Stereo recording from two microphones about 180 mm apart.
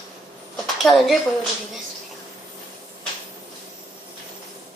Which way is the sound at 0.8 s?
Centre (ahead or behind).